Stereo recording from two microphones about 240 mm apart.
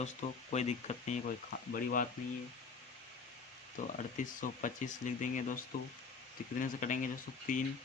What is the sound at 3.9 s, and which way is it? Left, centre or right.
Speech, left.